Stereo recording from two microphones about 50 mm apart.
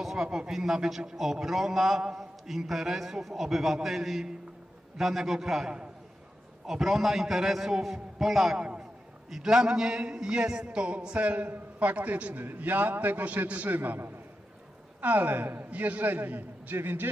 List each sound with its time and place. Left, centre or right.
0.0 s a man's voice: centre
9.3 s a sound: centre; by 12.4 s right
12.4 s a man's voice: right
13.7 s a man's voice: right